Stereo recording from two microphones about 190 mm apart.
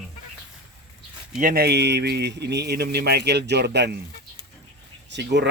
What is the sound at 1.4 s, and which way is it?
Speech, 50° right (ahead or behind).